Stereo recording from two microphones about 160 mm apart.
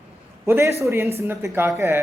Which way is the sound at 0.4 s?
15° right (ahead or behind).